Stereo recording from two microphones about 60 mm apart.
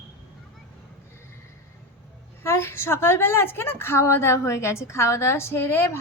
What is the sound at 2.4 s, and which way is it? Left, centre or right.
A woman's voice, left.